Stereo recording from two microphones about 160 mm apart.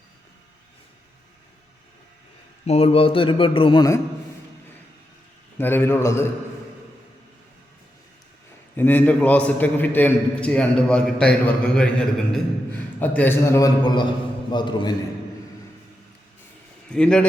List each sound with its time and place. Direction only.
2.6 s a man's voice: 40° left (ahead or behind)
5.5 s a man's voice: 15° left (ahead or behind)
8.7 s a man's voice: 10° left (ahead or behind); by 14.9 s 30° left (ahead or behind)
16.9 s a man's voice: 5° left (ahead or behind)